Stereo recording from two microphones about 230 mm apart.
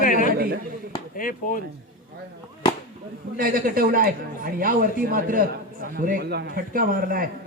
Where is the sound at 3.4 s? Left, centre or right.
Right.